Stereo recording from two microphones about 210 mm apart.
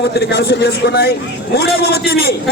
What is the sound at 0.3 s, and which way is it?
A man's voice, 50° left (ahead or behind).